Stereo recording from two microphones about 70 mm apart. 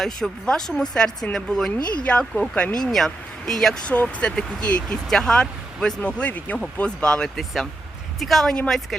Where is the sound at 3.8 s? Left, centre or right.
Centre.